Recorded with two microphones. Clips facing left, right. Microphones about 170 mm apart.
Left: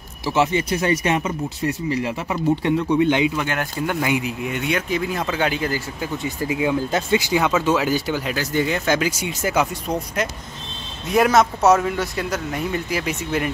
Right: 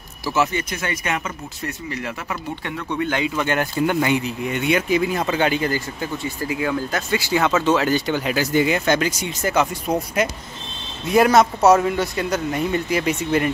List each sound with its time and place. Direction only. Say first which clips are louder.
0.3 s speech: left 2 dB; 25° left (ahead or behind)
3.0 s speech: left 4 dB; 20° left (ahead or behind); by 5.8 s centre (ahead or behind)
6.2 s speech: left 3 dB; 15° left (ahead or behind)
8.3 s speech: right 4 dB; 5° right (ahead or behind)
8.8 s speech: right 1 dB; 5° left (ahead or behind)
11.1 s speech: right 2 dB; centre (ahead or behind)